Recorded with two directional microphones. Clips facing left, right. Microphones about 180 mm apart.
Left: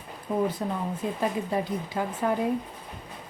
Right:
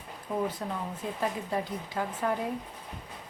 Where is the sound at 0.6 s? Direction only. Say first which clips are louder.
Left 5 dB; 15° left (ahead or behind).